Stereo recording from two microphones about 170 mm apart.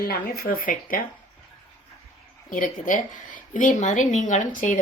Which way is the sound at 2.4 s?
50° left (ahead or behind).